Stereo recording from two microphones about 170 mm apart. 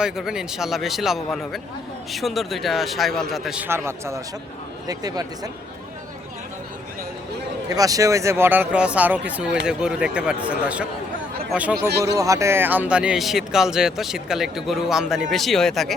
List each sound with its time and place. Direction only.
0.0 s a man's voice: 5° right (ahead or behind); by 5.5 s 20° right (ahead or behind)
7.7 s speech: 20° right (ahead or behind)
11.9 s speech: 75° right (ahead or behind)
12.1 s speech: 20° right (ahead or behind); by 16.0 s centre (ahead or behind)